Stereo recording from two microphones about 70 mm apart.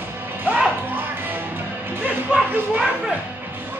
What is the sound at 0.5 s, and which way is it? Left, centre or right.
Music, right.